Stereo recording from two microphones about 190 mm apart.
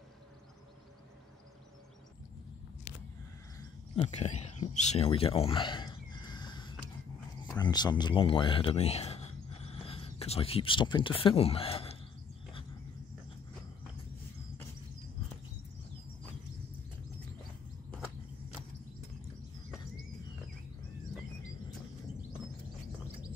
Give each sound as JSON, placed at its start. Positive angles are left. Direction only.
{"t": 3.9, "sound": "speech", "side_deg": 35}